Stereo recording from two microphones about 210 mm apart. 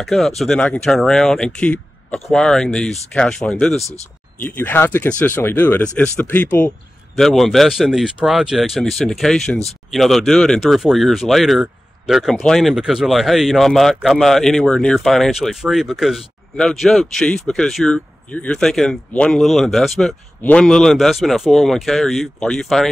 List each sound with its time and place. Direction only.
0.0 s speech: centre (ahead or behind)
3.8 s speech: 30° left (ahead or behind)
4.5 s speech: 10° left (ahead or behind)